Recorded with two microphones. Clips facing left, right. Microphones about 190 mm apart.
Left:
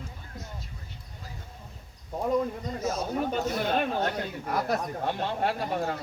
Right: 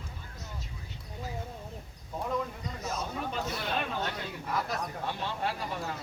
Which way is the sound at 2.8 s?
45° left (ahead or behind).